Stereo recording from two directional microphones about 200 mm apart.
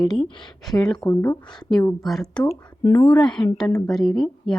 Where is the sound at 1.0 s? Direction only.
15° left (ahead or behind).